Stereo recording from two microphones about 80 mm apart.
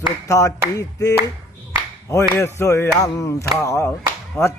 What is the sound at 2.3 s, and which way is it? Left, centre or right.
Music, left.